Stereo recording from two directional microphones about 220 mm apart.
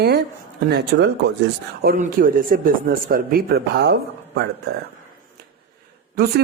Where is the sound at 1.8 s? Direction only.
40° right (ahead or behind).